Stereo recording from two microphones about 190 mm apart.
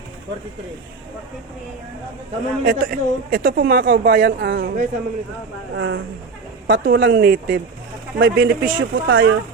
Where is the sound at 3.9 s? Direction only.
70° right (ahead or behind).